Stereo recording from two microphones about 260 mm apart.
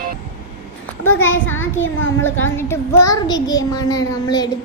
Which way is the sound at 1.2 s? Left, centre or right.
Centre.